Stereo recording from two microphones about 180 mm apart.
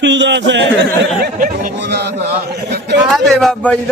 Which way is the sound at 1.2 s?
50° right (ahead or behind).